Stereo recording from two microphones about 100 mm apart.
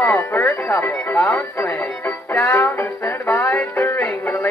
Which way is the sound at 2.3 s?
20° left (ahead or behind).